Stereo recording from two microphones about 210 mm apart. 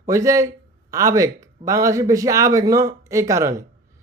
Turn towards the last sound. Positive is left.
turn(degrees=-15)  # may be behind; listen again after turning